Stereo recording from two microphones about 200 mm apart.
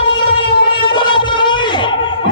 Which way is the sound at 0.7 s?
25° left (ahead or behind).